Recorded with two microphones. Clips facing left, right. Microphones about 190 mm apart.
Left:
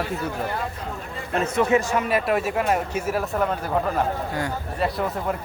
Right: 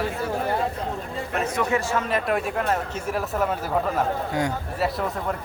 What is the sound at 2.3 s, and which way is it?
Speech, 5° left (ahead or behind).